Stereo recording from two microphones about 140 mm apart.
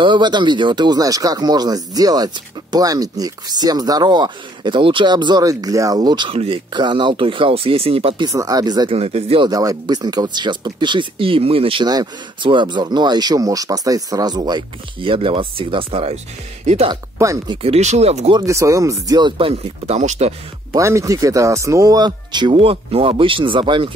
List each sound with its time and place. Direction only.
0.0 s speech: 35° right (ahead or behind)
8.3 s speech: 25° right (ahead or behind)
8.9 s speech: 45° right (ahead or behind)
9.5 s speech: 25° right (ahead or behind); by 16.9 s 50° right (ahead or behind)
16.9 s speech: 25° right (ahead or behind)
17.6 s speech: 50° right (ahead or behind)
18.3 s speech: 20° right (ahead or behind); by 20.3 s 50° right (ahead or behind)
20.7 s speech: 20° right (ahead or behind)